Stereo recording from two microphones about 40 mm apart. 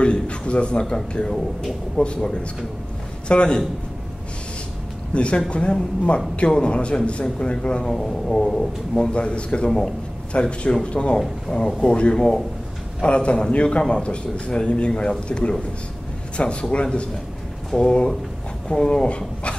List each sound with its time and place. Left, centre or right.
0.0 s a man's voice: left
2.0 s speech: left
3.3 s a man's voice: left
5.1 s a man's voice: left
7.8 s a man's voice: centre
11.1 s speech: centre
11.5 s a man's voice: centre